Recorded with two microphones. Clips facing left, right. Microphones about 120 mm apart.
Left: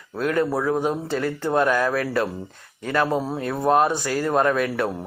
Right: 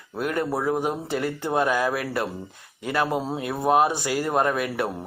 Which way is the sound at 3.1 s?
20° right (ahead or behind).